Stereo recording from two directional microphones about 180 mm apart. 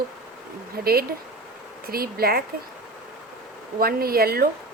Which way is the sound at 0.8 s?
55° right (ahead or behind).